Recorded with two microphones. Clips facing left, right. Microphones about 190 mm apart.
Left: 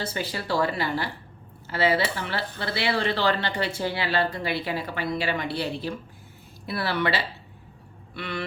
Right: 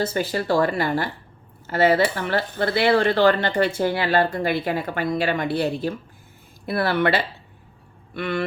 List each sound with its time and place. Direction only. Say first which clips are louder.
0.0 s speech: right 7 dB; 45° right (ahead or behind)